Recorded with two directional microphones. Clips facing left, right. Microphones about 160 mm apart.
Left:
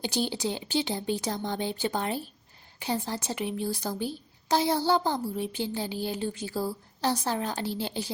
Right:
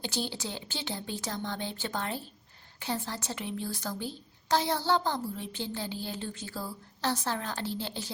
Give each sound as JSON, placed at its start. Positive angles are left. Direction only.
{"t": 0.0, "sound": "speech", "side_deg": 15}